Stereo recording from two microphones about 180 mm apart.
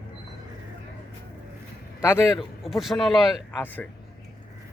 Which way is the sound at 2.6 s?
Centre (ahead or behind).